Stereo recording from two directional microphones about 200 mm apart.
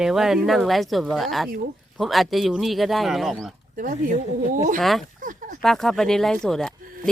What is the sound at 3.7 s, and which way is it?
Speech, 40° right (ahead or behind).